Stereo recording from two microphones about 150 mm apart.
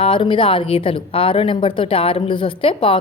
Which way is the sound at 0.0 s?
35° left (ahead or behind).